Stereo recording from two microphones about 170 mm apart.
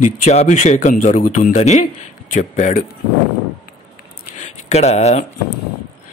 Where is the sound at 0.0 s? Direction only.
45° left (ahead or behind).